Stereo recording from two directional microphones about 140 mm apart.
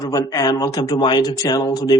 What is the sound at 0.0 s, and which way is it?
Speech, 25° left (ahead or behind).